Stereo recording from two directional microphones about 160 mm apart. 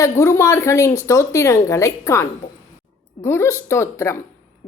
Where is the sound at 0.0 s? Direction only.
15° left (ahead or behind).